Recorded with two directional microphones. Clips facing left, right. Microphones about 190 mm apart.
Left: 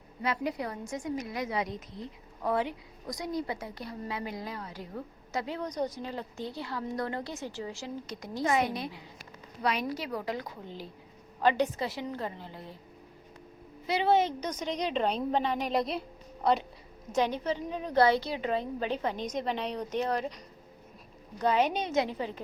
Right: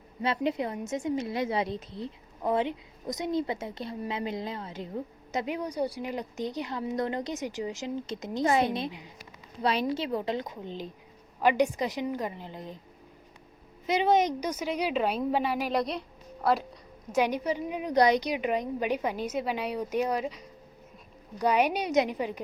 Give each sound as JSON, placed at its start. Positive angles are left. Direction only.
{"t": 0.2, "sound": "a woman's voice", "side_deg": -25}
{"t": 13.8, "sound": "a woman's voice", "side_deg": -20}
{"t": 17.2, "sound": "a woman's voice", "side_deg": -10}